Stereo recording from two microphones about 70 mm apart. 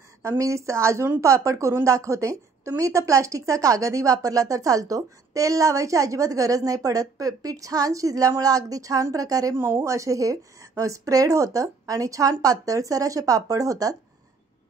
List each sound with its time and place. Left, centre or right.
0.2 s a woman's voice: right
9.6 s a woman's voice: right